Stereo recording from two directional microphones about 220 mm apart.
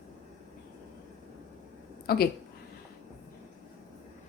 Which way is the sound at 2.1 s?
45° left (ahead or behind).